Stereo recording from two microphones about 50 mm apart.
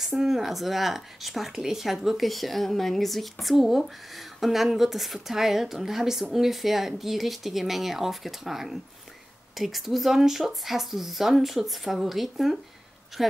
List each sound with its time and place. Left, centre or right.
0.0 s a woman's voice: centre